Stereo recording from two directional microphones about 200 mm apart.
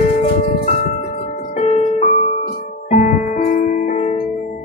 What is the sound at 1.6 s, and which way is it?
Music, 30° left (ahead or behind).